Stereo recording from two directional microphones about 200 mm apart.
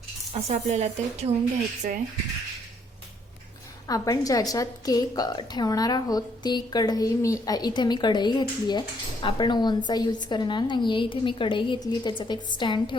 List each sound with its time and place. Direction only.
0.3 s speech: 35° right (ahead or behind)
3.8 s a woman's voice: 20° left (ahead or behind)